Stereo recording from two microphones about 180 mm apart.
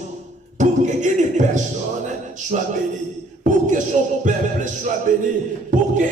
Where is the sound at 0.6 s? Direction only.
40° right (ahead or behind).